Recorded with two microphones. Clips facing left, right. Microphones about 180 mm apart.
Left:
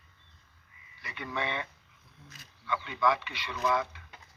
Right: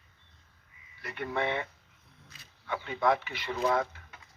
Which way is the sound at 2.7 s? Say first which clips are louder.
Right 1 dB; 45° right (ahead or behind).